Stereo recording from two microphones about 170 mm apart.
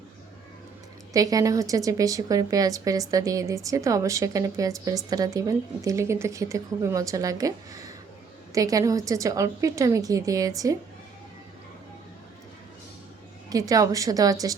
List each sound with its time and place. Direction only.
1.1 s a woman's voice: 20° right (ahead or behind)
13.5 s a woman's voice: 20° right (ahead or behind)